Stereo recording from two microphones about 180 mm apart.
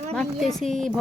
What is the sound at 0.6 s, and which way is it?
Speech, centre (ahead or behind).